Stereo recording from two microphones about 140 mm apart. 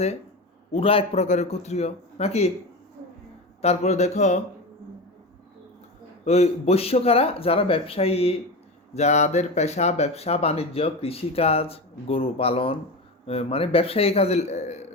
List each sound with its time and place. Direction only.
0.7 s speech: 40° left (ahead or behind)
3.6 s speech: 50° left (ahead or behind)
6.2 s speech: 50° left (ahead or behind)